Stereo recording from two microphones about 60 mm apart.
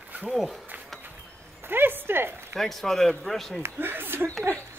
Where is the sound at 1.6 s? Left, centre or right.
Right.